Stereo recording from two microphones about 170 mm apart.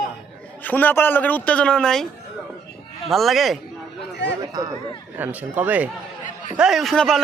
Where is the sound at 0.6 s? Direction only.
10° left (ahead or behind).